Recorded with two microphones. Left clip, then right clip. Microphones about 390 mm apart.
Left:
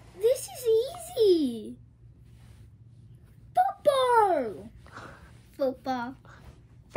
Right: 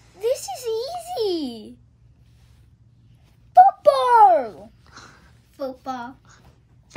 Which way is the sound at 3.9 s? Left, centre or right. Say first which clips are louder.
Right 9 dB; centre.